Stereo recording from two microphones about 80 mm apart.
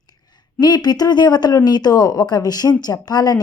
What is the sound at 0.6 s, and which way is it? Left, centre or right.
Speech, left.